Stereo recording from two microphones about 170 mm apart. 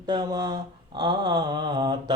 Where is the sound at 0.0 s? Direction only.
25° right (ahead or behind).